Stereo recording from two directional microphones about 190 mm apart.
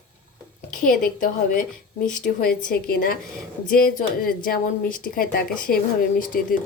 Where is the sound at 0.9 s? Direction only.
45° left (ahead or behind).